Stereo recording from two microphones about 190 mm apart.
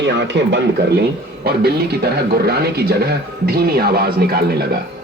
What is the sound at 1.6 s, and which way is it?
Speech, 55° right (ahead or behind).